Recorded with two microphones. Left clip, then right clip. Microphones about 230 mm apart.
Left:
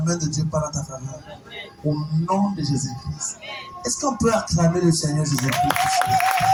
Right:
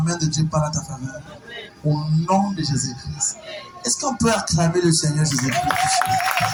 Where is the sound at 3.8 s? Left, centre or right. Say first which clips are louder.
Right 1 dB; right.